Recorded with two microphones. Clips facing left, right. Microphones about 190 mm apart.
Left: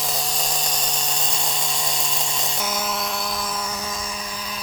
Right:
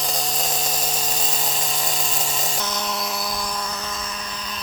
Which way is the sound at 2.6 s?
10° left (ahead or behind).